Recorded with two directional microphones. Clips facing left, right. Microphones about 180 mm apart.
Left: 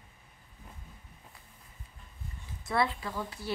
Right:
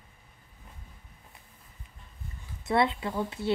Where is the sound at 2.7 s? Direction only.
20° right (ahead or behind).